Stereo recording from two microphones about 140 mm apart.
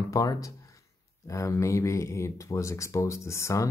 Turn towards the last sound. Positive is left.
turn(degrees=20)  # may be behind; listen again after turning